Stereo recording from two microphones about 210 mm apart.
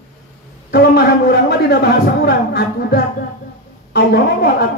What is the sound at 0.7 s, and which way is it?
A man's voice, 50° left (ahead or behind).